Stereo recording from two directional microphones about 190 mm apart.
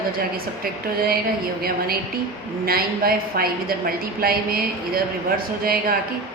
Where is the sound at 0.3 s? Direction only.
50° right (ahead or behind).